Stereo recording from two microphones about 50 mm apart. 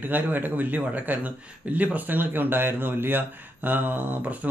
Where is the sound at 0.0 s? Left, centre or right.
Right.